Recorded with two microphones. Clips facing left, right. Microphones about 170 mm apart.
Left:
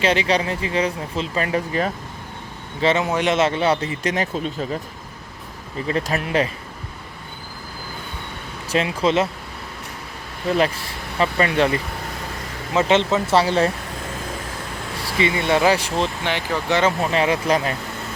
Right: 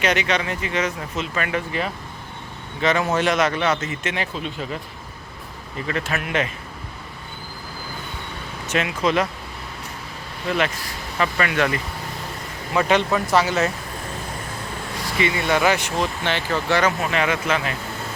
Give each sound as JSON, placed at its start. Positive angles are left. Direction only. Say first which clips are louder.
{"t": 0.0, "sound": "speech", "louder": "left 2 dB", "side_deg": 30}
{"t": 2.8, "sound": "speech", "louder": "left 2 dB", "side_deg": 25}
{"t": 3.1, "sound": "speech", "louder": "even", "side_deg": 15}
{"t": 3.3, "sound": "speech", "louder": "left 2 dB", "side_deg": 25}
{"t": 5.9, "sound": "speech", "louder": "left 3 dB", "side_deg": 35}
{"t": 8.7, "sound": "speech", "louder": "left 2 dB", "side_deg": 30}
{"t": 11.2, "sound": "speech", "louder": "left 3 dB", "side_deg": 30}
{"t": 15.2, "sound": "speech", "louder": "left 2 dB", "side_deg": 30}
{"t": 16.2, "sound": "speech", "louder": "even", "side_deg": 15}